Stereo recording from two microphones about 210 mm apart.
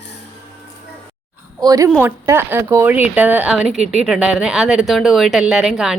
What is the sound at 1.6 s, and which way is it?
Speech, 15° right (ahead or behind).